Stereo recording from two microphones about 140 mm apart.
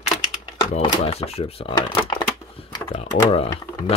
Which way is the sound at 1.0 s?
45° left (ahead or behind).